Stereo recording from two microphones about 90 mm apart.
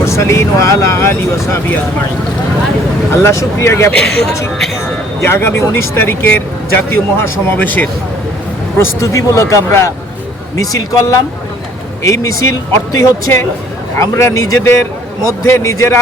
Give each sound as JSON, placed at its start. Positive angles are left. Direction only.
{"t": 0.0, "sound": "speech", "side_deg": 35}
{"t": 3.1, "sound": "speech", "side_deg": 30}
{"t": 3.9, "sound": "speech", "side_deg": 5}
{"t": 5.2, "sound": "speech", "side_deg": 30}
{"t": 8.8, "sound": "speech", "side_deg": 35}